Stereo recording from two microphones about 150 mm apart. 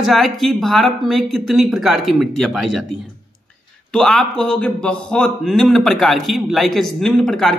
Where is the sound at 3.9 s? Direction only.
5° left (ahead or behind).